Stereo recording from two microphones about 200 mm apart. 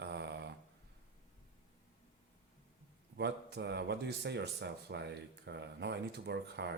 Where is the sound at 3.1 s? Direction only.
55° right (ahead or behind).